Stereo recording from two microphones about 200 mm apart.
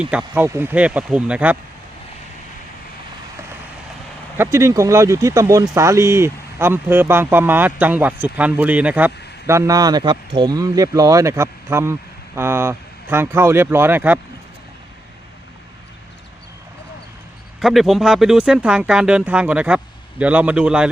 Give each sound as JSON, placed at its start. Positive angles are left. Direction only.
{"t": 0.0, "sound": "speech", "side_deg": -5}
{"t": 4.4, "sound": "speech", "side_deg": -15}
{"t": 17.6, "sound": "speech", "side_deg": 0}